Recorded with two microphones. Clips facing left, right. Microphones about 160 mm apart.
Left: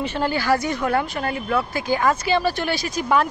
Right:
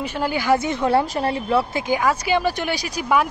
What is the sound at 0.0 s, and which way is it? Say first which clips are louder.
A woman's voice: even; 10° right (ahead or behind).